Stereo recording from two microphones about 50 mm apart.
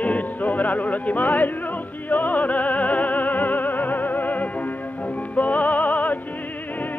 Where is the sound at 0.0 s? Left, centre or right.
Left.